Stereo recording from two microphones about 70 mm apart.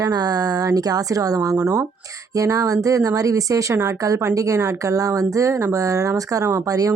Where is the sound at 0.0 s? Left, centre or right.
Right.